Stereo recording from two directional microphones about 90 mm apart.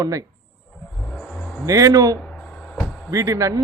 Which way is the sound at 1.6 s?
40° right (ahead or behind).